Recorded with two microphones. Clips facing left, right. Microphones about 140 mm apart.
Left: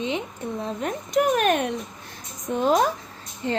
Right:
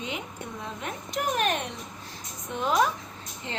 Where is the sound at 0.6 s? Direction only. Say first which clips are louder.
Left 7 dB; 40° left (ahead or behind).